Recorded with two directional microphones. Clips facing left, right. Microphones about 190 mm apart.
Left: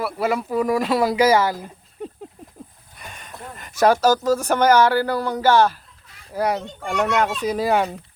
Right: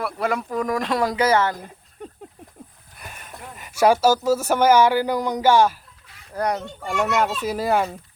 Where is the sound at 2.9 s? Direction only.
5° right (ahead or behind).